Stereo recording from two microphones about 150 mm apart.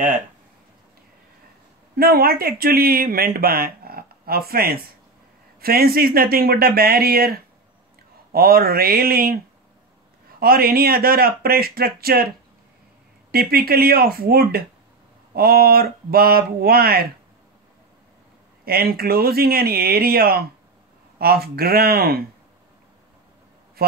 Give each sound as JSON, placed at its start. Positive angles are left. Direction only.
{"t": 2.0, "sound": "speech", "side_deg": -90}
{"t": 10.4, "sound": "speech", "side_deg": -90}
{"t": 18.7, "sound": "speech", "side_deg": -90}
{"t": 23.8, "sound": "speech", "side_deg": -90}